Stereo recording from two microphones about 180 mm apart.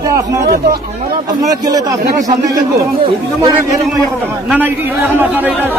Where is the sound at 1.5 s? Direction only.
20° right (ahead or behind).